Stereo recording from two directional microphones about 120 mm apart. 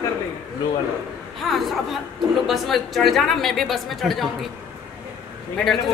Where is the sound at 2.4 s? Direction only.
Centre (ahead or behind).